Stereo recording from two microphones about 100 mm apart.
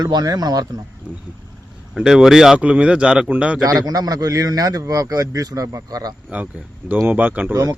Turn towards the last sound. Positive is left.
turn(degrees=-15)  # may be behind; listen again after turning